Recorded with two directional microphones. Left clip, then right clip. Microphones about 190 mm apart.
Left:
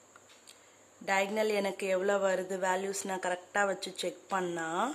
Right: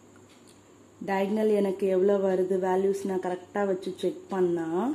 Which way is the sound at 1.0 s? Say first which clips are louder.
Right 3 dB; 25° left (ahead or behind).